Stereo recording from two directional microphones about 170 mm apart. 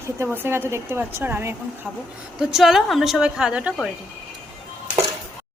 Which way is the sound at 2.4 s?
5° right (ahead or behind).